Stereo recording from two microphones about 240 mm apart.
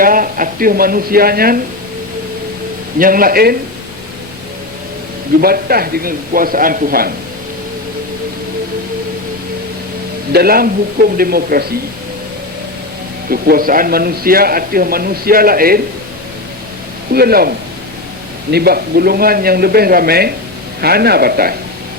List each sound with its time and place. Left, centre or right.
0.0 s speech: right
3.0 s a man's voice: right
5.4 s a man's voice: right
10.3 s a man's voice: right
13.3 s a man's voice: right
17.1 s a man's voice: right
18.5 s a man's voice: right